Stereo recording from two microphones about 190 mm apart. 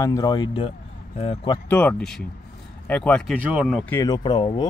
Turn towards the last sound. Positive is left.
turn(degrees=25)  # may be behind; listen again after turning